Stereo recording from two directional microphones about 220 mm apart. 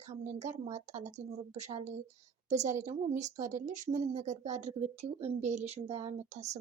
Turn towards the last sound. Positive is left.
turn(degrees=-30)  # may be behind; listen again after turning